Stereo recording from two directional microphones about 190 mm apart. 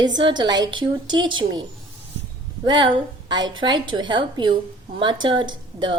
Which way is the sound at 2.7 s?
25° right (ahead or behind).